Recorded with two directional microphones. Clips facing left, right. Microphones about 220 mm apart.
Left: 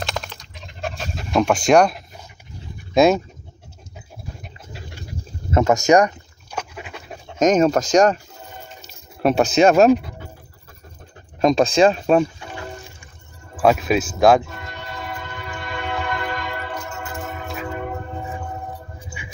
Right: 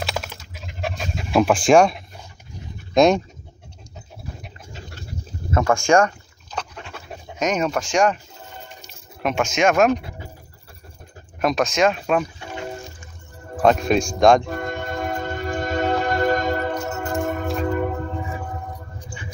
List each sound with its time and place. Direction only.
0.0 s dog: 5° right (ahead or behind)
1.7 s a man's voice: centre (ahead or behind)
2.9 s dog: 5° left (ahead or behind)
5.5 s speech: 20° left (ahead or behind)
5.9 s pant: 15° left (ahead or behind)
7.3 s speech: 45° left (ahead or behind)
9.2 s speech: 35° left (ahead or behind)
11.4 s speech: 30° left (ahead or behind)
13.6 s a man's voice: 5° left (ahead or behind)
14.5 s train: 50° right (ahead or behind)
17.1 s music: 50° right (ahead or behind)
19.2 s music: 10° left (ahead or behind)